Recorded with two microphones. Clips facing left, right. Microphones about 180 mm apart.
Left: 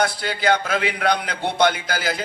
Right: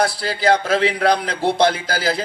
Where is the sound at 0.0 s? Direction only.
30° right (ahead or behind).